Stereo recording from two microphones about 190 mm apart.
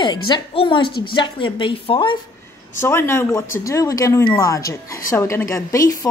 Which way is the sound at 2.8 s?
10° left (ahead or behind).